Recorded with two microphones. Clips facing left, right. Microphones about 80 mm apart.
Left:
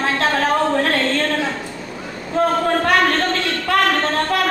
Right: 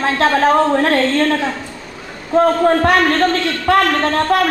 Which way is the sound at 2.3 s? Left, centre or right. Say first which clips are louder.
Right 5 dB; right.